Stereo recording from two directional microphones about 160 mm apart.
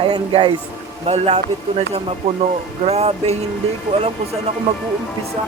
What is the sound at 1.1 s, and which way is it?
Speech, 40° right (ahead or behind).